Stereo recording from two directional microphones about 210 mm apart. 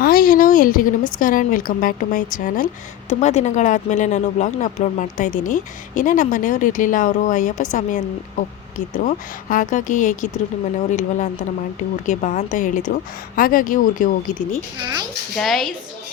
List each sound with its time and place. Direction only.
0.0 s a woman's voice: 40° left (ahead or behind)
14.8 s a woman's voice: 20° right (ahead or behind)
15.4 s a woman's voice: centre (ahead or behind)